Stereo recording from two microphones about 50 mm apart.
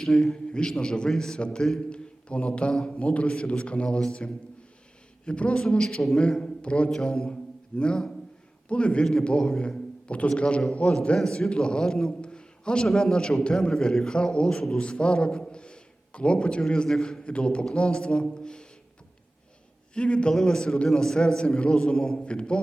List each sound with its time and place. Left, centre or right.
0.0 s a man's voice: centre
6.9 s a man's voice: centre
19.9 s a man's voice: centre